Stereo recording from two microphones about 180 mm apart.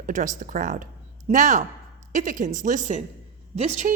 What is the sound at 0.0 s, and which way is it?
Speech, 45° right (ahead or behind).